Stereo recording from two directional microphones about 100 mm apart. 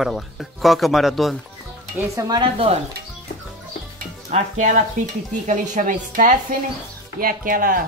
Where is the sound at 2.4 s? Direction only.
60° right (ahead or behind).